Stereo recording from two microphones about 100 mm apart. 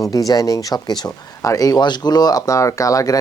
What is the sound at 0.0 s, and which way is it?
Speech, 35° left (ahead or behind).